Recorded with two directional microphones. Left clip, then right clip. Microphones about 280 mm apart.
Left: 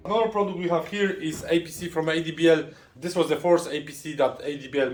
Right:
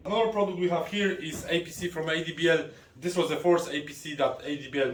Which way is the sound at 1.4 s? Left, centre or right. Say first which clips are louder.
Left 4 dB; centre.